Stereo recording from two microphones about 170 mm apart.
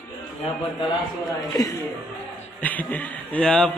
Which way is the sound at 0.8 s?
20° left (ahead or behind).